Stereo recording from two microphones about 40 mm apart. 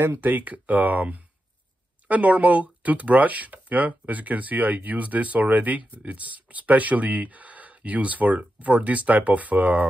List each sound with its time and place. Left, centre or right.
0.2 s speech: right